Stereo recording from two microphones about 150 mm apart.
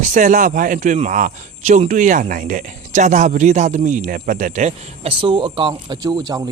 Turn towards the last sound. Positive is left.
turn(degrees=-25)  # may be behind; listen again after turning